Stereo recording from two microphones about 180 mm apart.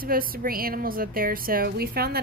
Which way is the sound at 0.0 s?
55° right (ahead or behind).